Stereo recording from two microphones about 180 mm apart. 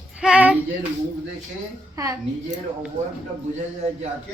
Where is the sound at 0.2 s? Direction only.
5° right (ahead or behind).